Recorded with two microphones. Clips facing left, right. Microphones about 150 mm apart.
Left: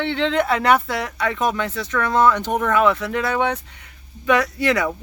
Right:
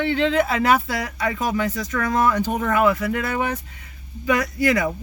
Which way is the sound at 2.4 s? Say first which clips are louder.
Left 1 dB; 80° left.